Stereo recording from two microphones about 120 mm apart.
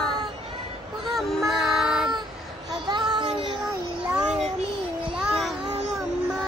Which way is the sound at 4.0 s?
5° right (ahead or behind).